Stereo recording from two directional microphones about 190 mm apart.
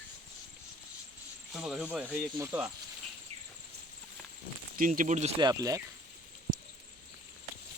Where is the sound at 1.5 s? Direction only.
Centre (ahead or behind).